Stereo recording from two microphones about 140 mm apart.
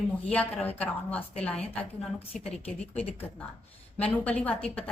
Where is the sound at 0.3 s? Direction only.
10° left (ahead or behind).